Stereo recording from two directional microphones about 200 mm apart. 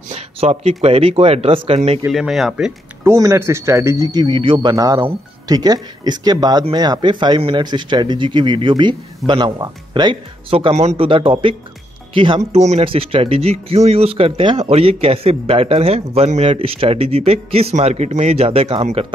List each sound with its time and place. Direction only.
0.1 s speech: 30° right (ahead or behind)
2.0 s speech: centre (ahead or behind); by 19.1 s 30° right (ahead or behind)